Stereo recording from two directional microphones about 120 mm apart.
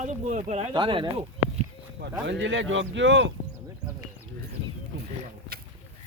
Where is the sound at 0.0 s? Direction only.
90° right; by 0.7 s 70° right (ahead or behind).